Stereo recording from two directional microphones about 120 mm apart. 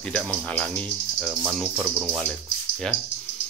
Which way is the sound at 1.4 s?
10° right (ahead or behind).